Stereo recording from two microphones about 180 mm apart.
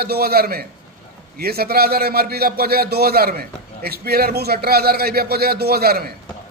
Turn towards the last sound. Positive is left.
turn(degrees=-60)  # may be behind; listen again after turning